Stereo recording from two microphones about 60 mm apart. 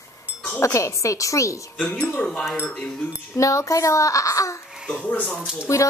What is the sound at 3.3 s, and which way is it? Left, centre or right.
A woman's voice, left.